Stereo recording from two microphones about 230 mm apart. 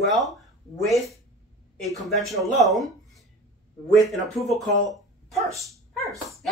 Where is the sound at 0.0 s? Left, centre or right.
Centre.